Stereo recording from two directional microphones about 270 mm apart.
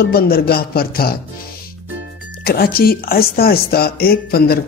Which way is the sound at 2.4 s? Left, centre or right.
Left.